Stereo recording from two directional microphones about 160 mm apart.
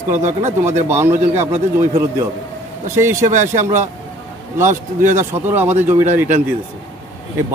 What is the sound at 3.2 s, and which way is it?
Speech, 50° right (ahead or behind).